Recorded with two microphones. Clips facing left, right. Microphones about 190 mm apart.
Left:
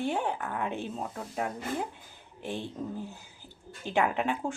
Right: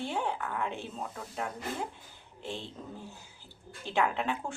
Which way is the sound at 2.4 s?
15° left (ahead or behind).